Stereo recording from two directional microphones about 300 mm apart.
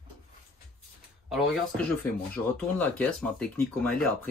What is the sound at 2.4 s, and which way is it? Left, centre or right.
Speech, centre.